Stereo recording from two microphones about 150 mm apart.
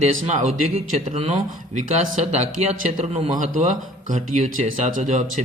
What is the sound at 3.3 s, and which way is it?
Speech, 60° right (ahead or behind).